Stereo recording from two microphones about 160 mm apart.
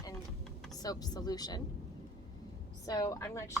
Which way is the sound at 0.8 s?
25° left (ahead or behind).